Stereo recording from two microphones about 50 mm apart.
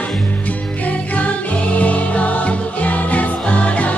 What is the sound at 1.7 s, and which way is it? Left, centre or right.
Music, left.